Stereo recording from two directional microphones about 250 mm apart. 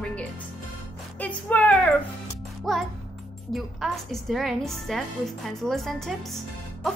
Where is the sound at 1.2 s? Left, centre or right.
Centre.